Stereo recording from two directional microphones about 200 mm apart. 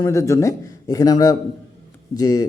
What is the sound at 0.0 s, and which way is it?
Speech, 15° left (ahead or behind).